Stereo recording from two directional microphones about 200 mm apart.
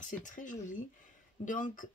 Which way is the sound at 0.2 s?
40° left (ahead or behind).